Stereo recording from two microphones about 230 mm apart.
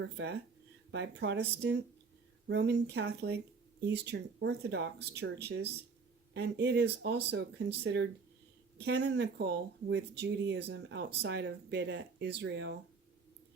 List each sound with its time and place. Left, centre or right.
0.0 s speech: right